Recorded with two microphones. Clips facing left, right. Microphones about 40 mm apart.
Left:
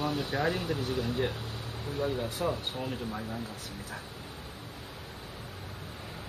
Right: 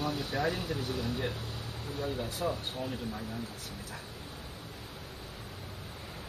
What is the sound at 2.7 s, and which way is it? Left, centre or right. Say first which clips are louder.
Speech: left 2 dB; left.